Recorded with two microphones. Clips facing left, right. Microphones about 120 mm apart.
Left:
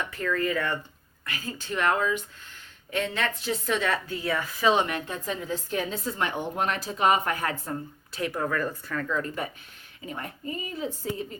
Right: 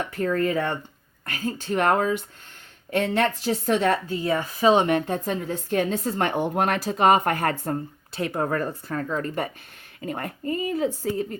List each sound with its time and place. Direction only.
0.0 s a woman's voice: 40° right (ahead or behind)
2.9 s speech: 55° right (ahead or behind)
3.5 s a woman's voice: 40° right (ahead or behind)
4.8 s speech: 40° right (ahead or behind)
8.1 s a woman's voice: 30° right (ahead or behind)
10.1 s speech: 60° right (ahead or behind)